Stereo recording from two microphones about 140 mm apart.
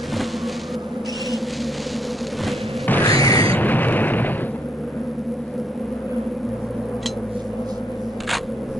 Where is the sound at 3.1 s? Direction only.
25° left (ahead or behind).